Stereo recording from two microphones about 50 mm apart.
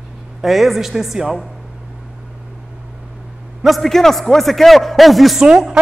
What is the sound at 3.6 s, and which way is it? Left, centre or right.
A man's voice, centre.